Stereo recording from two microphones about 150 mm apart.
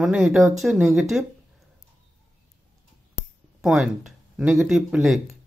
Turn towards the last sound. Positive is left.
turn(degrees=0)  # may be behind; listen again after turning